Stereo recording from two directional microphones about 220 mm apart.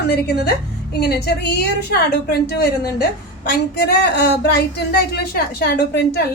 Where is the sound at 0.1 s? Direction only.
50° left (ahead or behind).